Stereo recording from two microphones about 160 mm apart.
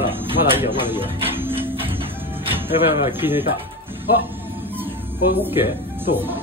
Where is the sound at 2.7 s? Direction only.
15° right (ahead or behind).